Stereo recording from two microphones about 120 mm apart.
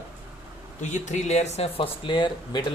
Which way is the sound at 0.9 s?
85° left.